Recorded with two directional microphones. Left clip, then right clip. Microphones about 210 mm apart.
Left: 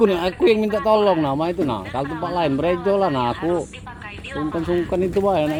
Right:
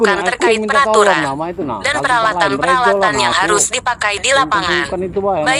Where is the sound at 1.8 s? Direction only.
50° right (ahead or behind).